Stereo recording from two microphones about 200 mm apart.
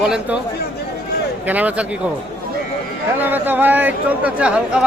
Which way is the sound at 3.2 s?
10° right (ahead or behind).